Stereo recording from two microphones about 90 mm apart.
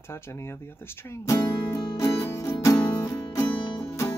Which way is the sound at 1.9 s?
35° left (ahead or behind).